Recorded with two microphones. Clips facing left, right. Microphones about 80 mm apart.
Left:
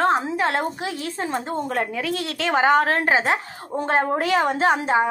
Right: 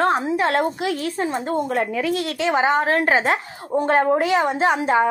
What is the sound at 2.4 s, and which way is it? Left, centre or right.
Speech, left.